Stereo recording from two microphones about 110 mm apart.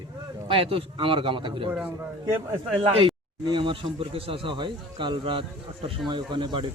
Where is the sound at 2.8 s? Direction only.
55° right (ahead or behind).